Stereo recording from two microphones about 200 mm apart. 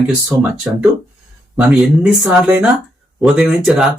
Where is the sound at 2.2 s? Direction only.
10° right (ahead or behind).